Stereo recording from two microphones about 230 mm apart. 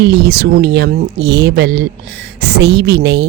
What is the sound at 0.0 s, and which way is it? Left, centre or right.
Speech, right.